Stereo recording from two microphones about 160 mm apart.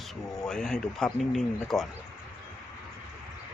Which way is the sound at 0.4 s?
5° left (ahead or behind).